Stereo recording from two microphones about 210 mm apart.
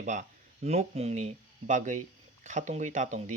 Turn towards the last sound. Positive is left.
turn(degrees=-35)  # may be behind; listen again after turning